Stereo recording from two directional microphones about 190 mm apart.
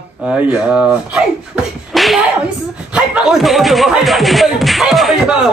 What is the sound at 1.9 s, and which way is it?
Whip, centre (ahead or behind).